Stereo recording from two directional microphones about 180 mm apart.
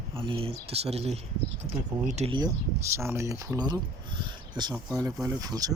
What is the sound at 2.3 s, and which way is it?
Speech, 20° right (ahead or behind).